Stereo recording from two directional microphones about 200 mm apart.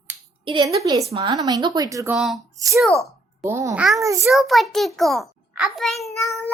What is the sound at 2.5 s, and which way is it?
A child's voice, 15° right (ahead or behind).